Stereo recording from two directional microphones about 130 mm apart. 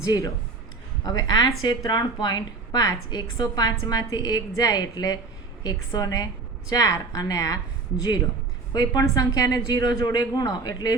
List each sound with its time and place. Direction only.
0.0 s a woman's voice: 25° left (ahead or behind)
8.7 s a woman's voice: 30° left (ahead or behind)